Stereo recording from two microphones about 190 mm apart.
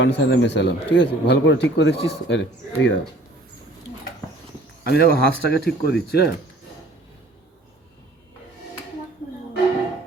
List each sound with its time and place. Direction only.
0.0 s speech: 65° left (ahead or behind)
4.8 s speech: 55° left (ahead or behind)